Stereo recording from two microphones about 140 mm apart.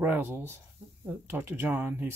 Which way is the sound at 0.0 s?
15° right (ahead or behind).